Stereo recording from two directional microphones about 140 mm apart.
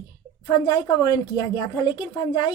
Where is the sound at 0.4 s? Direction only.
30° left (ahead or behind).